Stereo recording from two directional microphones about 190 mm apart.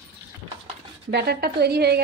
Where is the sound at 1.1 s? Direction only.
60° right (ahead or behind).